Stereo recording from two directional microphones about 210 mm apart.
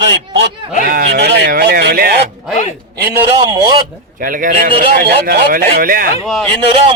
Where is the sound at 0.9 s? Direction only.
45° right (ahead or behind).